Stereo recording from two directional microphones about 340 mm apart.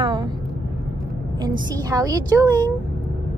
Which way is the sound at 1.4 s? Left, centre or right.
Centre.